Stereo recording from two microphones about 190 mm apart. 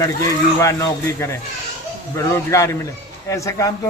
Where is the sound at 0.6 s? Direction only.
15° left (ahead or behind).